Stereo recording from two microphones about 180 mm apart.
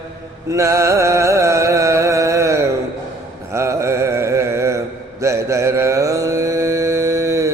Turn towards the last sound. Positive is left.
turn(degrees=-15)  # may be behind; listen again after turning